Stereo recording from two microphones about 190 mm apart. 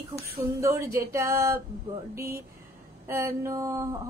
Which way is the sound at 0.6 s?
15° right (ahead or behind).